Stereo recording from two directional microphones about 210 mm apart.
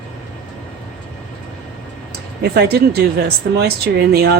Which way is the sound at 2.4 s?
50° right (ahead or behind).